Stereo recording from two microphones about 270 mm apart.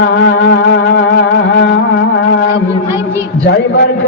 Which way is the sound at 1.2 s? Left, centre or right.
Left.